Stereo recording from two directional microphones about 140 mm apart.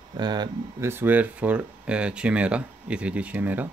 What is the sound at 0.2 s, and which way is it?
Speech, 30° right (ahead or behind).